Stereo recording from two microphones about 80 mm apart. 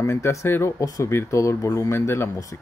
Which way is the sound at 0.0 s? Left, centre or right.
Left.